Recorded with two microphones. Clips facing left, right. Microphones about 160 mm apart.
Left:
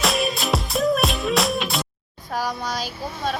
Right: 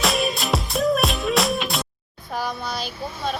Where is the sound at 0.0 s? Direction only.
Centre (ahead or behind).